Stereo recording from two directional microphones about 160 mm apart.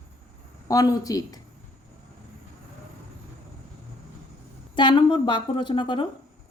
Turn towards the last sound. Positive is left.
turn(degrees=30)  # may be behind; listen again after turning